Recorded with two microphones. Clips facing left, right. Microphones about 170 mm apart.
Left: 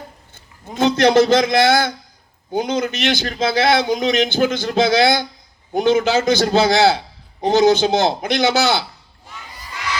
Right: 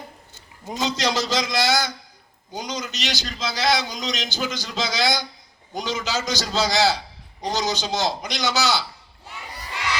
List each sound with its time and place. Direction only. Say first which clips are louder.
0.3 s a man's voice: left 7 dB; 55° left (ahead or behind)